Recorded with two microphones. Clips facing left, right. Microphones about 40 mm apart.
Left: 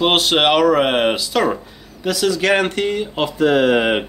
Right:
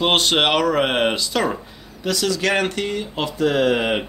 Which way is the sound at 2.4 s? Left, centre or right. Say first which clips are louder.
Left 4 dB; left.